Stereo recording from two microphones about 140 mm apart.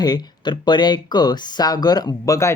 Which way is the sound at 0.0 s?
30° left (ahead or behind).